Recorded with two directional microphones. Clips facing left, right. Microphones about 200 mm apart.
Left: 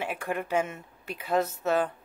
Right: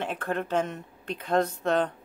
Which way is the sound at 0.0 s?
10° left (ahead or behind).